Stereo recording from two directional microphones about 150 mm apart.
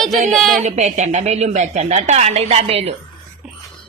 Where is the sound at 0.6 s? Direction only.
50° right (ahead or behind).